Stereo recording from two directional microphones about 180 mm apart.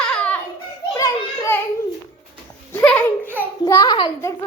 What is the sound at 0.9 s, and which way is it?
Children playing, 20° left (ahead or behind).